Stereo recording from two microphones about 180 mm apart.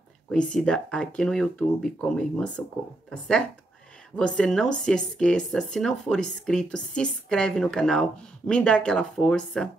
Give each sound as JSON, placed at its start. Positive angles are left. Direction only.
{"t": 0.3, "sound": "speech", "side_deg": 5}